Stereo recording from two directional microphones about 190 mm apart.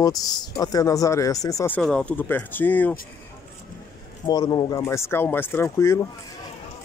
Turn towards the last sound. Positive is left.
turn(degrees=15)  # may be behind; listen again after turning